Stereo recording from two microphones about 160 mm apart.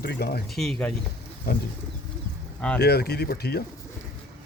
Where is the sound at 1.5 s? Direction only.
75° left (ahead or behind).